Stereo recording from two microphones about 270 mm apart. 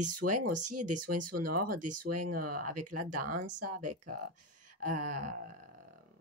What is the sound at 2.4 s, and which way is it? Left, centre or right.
Speech, right.